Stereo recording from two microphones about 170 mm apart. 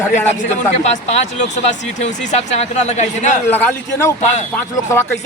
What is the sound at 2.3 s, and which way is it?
Speech, 40° left (ahead or behind).